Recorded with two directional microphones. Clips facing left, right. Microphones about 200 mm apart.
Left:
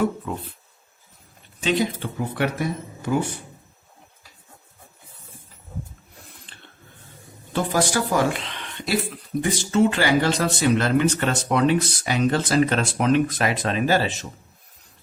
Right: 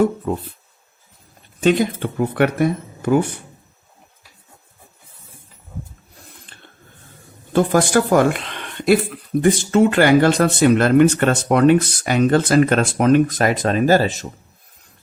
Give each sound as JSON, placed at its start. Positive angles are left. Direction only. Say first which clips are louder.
{"t": 1.6, "sound": "speech", "louder": "right 6 dB", "side_deg": -55}
{"t": 7.5, "sound": "speech", "louder": "right 7 dB", "side_deg": -50}